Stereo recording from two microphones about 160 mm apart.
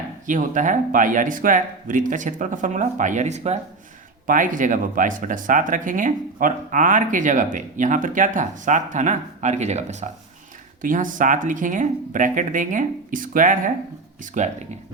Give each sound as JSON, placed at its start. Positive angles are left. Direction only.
{"t": 0.3, "sound": "speech", "side_deg": -55}
{"t": 4.3, "sound": "speech", "side_deg": -55}
{"t": 10.8, "sound": "speech", "side_deg": -55}